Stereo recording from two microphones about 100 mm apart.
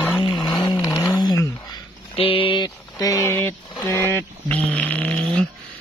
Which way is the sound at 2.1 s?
65° left (ahead or behind).